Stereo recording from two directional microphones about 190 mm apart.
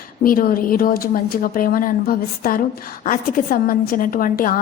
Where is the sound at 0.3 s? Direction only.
50° left (ahead or behind).